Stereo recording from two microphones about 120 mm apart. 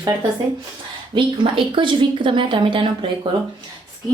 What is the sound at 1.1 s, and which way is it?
Speech, 45° right (ahead or behind).